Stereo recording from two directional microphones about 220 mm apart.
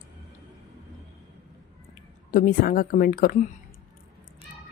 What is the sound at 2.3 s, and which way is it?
Speech, 40° left (ahead or behind).